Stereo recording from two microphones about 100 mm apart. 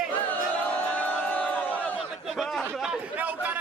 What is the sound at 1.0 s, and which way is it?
Crowd, 15° left (ahead or behind).